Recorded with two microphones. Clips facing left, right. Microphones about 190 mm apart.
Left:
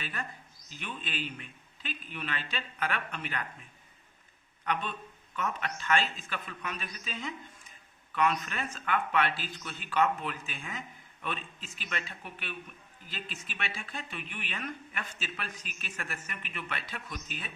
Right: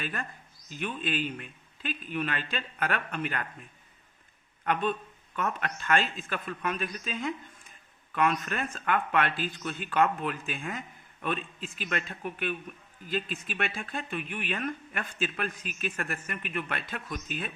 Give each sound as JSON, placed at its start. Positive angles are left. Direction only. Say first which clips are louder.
{"t": 0.0, "sound": "speech", "louder": "right 4 dB", "side_deg": -50}
{"t": 4.6, "sound": "speech", "louder": "right 6 dB", "side_deg": -50}